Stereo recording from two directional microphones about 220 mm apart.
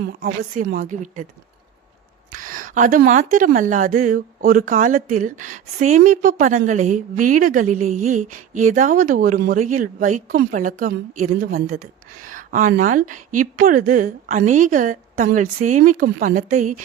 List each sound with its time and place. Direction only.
0.0 s a woman's voice: 40° right (ahead or behind)
2.3 s a woman's voice: 40° right (ahead or behind)